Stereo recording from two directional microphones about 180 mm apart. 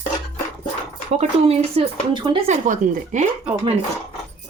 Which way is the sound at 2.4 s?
45° right (ahead or behind).